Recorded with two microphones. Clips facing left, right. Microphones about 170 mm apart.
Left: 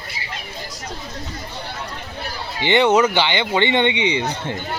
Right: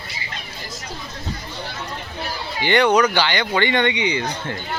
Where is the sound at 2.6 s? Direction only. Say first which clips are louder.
Left 1 dB; 20° left (ahead or behind).